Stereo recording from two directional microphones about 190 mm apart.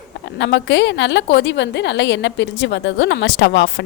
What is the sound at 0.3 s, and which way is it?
A woman's voice, 70° left (ahead or behind).